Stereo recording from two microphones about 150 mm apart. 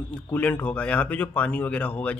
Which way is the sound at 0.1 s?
10° left (ahead or behind).